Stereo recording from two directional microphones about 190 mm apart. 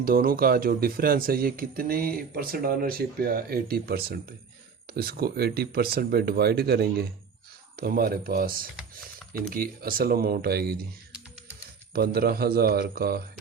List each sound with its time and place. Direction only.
0.0 s speech: 50° right (ahead or behind)
11.9 s speech: 55° right (ahead or behind)